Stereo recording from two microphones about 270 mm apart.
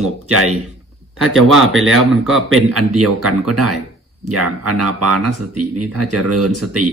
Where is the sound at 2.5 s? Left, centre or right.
Right.